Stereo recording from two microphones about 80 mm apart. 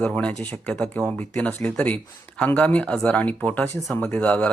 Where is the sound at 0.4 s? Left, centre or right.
Centre.